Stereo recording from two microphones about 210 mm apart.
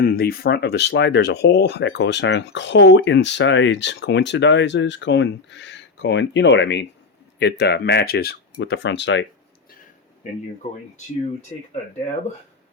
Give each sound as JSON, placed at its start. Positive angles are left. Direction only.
{"t": 0.0, "sound": "speech", "side_deg": 45}
{"t": 10.6, "sound": "speech", "side_deg": 30}